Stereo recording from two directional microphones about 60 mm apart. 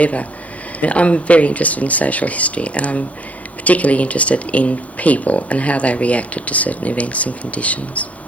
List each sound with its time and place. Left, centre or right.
0.0 s speech: left